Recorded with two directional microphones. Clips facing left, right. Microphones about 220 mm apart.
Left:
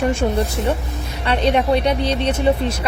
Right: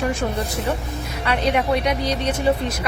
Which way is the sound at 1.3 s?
30° left (ahead or behind).